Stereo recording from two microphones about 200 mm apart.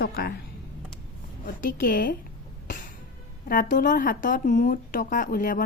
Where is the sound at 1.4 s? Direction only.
45° left (ahead or behind).